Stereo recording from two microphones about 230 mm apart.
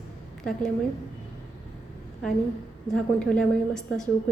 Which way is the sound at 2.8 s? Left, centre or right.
Centre.